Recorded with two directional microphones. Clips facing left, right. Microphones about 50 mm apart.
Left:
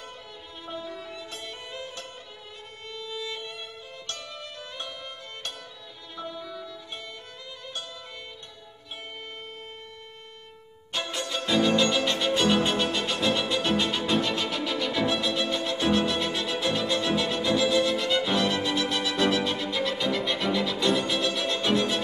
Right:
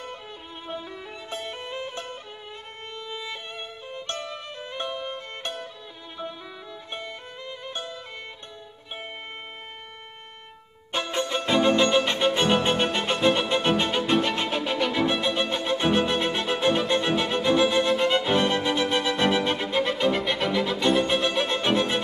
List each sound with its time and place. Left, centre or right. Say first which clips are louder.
0.7 s music: even; right
2.9 s violin: even; right
6.1 s music: left 1 dB; right
10.9 s music: right 5 dB; right
20.2 s music: right 2 dB; centre
21.1 s music: right 3 dB; right